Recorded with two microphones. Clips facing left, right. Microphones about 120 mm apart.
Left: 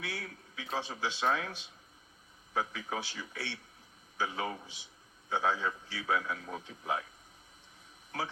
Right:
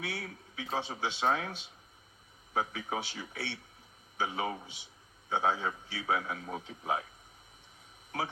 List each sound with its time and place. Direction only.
0.0 s a man's voice: 25° right (ahead or behind)